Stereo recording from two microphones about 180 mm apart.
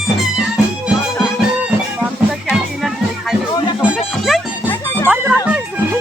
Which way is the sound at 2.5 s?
Centre (ahead or behind).